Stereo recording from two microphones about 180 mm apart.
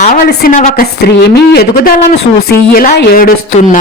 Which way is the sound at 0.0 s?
50° left (ahead or behind).